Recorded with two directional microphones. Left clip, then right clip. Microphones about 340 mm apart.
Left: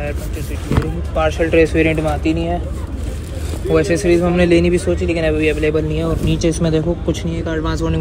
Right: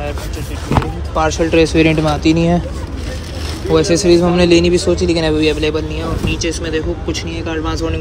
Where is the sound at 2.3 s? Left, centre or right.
Right.